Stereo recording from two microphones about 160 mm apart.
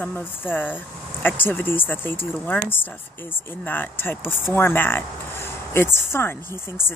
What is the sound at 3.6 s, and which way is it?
Speech, 10° left (ahead or behind).